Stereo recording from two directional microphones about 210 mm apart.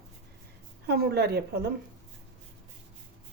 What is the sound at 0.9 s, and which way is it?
Speech, 50° right (ahead or behind).